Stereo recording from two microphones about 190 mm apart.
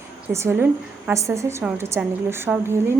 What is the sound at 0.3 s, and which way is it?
A woman's voice, 15° right (ahead or behind).